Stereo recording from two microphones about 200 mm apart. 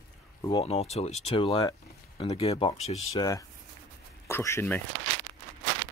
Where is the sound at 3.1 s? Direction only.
20° left (ahead or behind).